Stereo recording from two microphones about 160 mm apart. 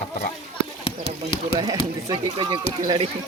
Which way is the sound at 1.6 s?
30° right (ahead or behind).